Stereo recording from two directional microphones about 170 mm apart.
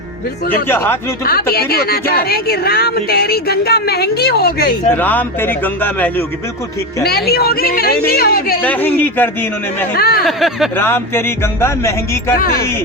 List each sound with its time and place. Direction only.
0.5 s speech: 15° left (ahead or behind)
1.2 s speech: 60° left (ahead or behind)
4.9 s speech: 10° left (ahead or behind)
7.3 s speech: 65° left (ahead or behind)
8.6 s speech: 10° left (ahead or behind)
9.9 s speech: 65° left (ahead or behind)
10.2 s speech: centre (ahead or behind)
10.8 s speech: 15° left (ahead or behind)